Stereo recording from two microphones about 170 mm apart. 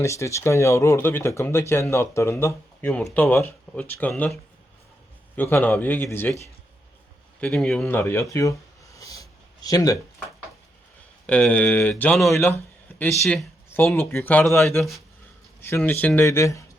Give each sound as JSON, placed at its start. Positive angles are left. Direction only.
{"t": 0.0, "sound": "speech", "side_deg": 15}
{"t": 5.4, "sound": "speech", "side_deg": 10}
{"t": 7.4, "sound": "speech", "side_deg": 5}
{"t": 9.0, "sound": "a sound", "side_deg": 20}
{"t": 9.6, "sound": "speech", "side_deg": 20}
{"t": 11.3, "sound": "speech", "side_deg": 5}
{"t": 13.8, "sound": "speech", "side_deg": 15}
{"t": 15.6, "sound": "speech", "side_deg": 15}